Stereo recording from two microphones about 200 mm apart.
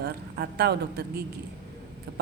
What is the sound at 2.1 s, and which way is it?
Speech, 50° right (ahead or behind).